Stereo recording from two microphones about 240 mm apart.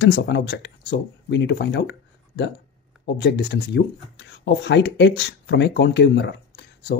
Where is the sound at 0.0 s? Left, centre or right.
Left.